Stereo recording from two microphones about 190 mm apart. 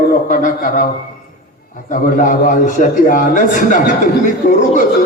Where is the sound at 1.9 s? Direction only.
45° left (ahead or behind).